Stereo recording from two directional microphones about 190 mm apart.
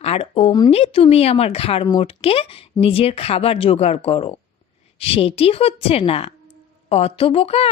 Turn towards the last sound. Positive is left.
turn(degrees=30)  # may be behind; listen again after turning